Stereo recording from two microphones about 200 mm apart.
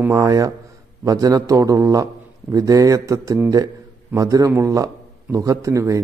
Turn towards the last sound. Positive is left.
turn(degrees=-15)  # may be behind; listen again after turning